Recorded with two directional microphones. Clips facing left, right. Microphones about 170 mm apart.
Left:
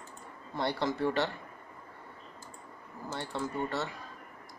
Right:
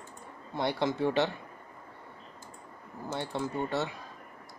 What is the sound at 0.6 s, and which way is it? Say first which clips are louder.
Speech: right 2 dB; 20° right (ahead or behind).